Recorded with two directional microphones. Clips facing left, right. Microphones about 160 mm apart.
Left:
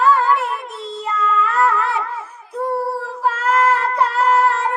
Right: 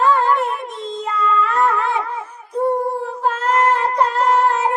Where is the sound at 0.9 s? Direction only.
5° left (ahead or behind).